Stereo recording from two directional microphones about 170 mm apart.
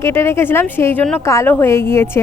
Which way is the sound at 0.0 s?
15° left (ahead or behind).